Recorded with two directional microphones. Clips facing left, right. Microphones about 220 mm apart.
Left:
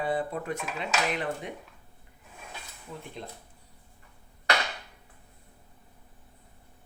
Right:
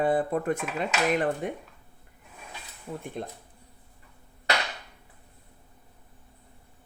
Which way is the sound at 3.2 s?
50° right (ahead or behind).